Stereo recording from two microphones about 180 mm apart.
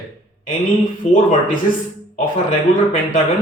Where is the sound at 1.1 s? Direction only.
45° left (ahead or behind).